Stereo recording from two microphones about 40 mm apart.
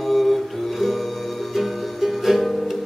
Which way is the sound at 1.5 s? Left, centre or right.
Centre.